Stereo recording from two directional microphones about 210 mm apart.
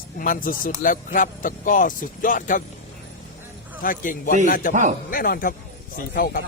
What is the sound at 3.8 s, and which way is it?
Speech, 40° left (ahead or behind).